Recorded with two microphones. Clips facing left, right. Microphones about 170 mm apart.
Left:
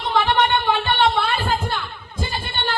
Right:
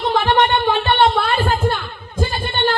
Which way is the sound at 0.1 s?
50° right (ahead or behind).